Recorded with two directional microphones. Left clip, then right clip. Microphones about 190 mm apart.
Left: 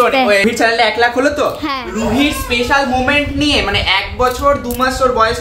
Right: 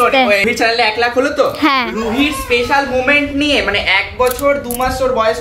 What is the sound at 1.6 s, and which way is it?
Speech, 35° right (ahead or behind).